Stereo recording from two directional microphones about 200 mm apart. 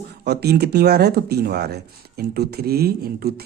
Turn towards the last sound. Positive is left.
turn(degrees=-50)  # may be behind; listen again after turning